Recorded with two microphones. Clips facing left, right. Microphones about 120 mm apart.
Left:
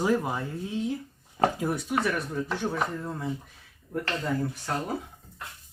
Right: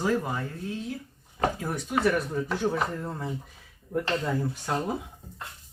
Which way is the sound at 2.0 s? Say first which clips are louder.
Right 3 dB; 5° right (ahead or behind).